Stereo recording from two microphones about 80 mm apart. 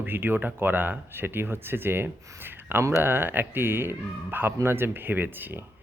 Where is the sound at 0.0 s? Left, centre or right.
Right.